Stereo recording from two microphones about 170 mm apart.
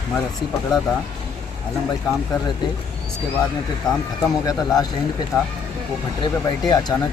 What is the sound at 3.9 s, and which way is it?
Speech, centre (ahead or behind).